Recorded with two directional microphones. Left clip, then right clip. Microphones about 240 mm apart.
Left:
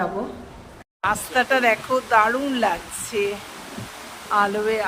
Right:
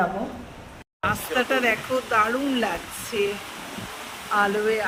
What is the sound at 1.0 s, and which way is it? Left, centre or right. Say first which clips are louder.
Speech: left 3 dB; centre.